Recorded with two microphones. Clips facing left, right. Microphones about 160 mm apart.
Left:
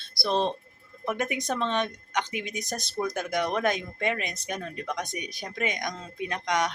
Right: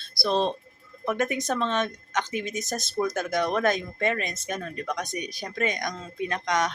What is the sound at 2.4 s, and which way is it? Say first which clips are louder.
Speech: right 3 dB; 45° right (ahead or behind).